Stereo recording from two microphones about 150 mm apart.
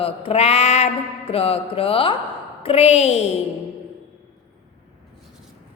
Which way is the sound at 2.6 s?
45° left (ahead or behind).